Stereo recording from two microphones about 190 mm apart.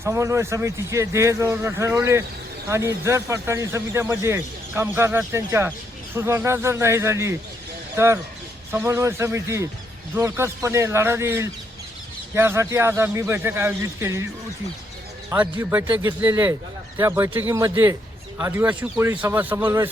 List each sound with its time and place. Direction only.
0.0 s speech: 15° right (ahead or behind)
15.3 s speech: 15° right (ahead or behind)